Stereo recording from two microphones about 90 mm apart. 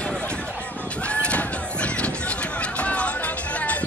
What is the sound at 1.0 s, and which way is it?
Run, 15° left (ahead or behind).